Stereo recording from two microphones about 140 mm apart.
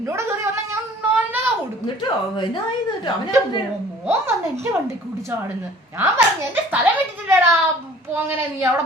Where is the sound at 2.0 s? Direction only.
35° left (ahead or behind).